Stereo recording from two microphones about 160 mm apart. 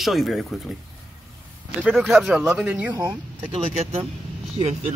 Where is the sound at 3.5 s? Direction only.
35° right (ahead or behind).